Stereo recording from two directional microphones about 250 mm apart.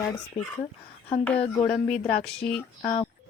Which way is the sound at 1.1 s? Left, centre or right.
Centre.